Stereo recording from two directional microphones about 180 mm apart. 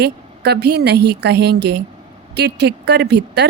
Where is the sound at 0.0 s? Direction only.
65° right (ahead or behind).